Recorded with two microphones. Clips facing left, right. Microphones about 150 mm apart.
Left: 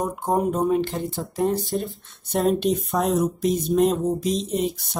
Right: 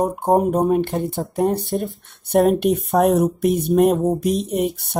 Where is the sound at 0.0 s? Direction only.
55° right (ahead or behind).